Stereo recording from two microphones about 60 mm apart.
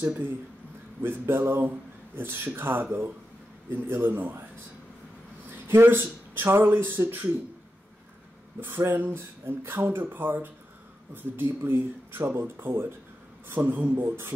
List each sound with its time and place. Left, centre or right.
1.0 s speech: right
5.5 s speech: right
8.5 s speech: right